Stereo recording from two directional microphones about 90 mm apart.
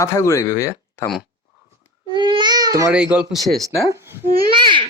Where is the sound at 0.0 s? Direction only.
30° left (ahead or behind).